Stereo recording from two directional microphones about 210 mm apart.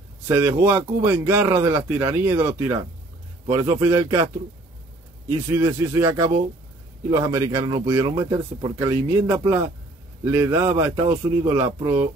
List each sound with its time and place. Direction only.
0.3 s speech: 10° right (ahead or behind)
5.5 s speech: 15° right (ahead or behind)